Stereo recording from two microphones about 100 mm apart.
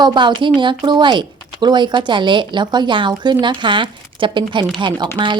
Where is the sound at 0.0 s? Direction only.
50° right (ahead or behind).